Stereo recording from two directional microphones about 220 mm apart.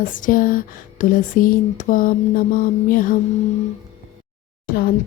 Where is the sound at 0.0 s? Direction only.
40° left (ahead or behind).